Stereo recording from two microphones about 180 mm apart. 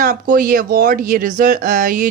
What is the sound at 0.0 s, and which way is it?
Speech, 50° right (ahead or behind).